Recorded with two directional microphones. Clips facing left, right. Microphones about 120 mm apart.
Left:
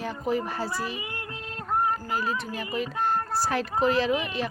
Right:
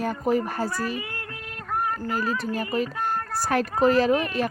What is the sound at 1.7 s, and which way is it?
Music, 25° left (ahead or behind).